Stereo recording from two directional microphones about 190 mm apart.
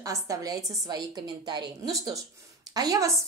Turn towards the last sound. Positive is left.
turn(degrees=-20)  # may be behind; listen again after turning